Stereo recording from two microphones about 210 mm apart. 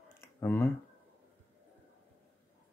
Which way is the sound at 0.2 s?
10° left (ahead or behind).